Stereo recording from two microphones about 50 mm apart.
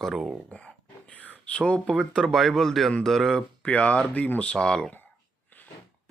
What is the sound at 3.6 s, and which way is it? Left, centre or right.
Speech, left.